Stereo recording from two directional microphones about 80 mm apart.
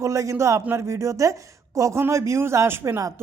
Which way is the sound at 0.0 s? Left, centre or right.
Right.